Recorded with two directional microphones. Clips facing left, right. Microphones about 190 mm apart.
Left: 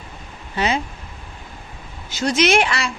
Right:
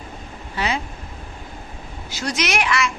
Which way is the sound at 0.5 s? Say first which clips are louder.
Left 3 dB; 25° left (ahead or behind).